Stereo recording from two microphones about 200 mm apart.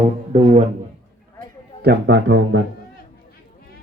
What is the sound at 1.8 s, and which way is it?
Speech, 60° right (ahead or behind).